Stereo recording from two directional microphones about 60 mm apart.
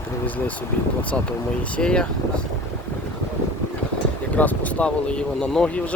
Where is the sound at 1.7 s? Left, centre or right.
Centre.